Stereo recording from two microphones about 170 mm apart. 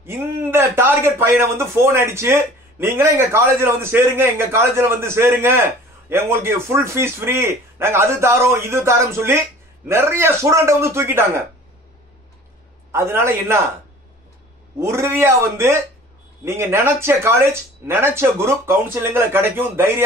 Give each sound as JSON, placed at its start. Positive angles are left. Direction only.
{"t": 0.0, "sound": "a man's voice", "side_deg": -15}
{"t": 12.9, "sound": "a man's voice", "side_deg": -15}
{"t": 14.8, "sound": "a man's voice", "side_deg": -15}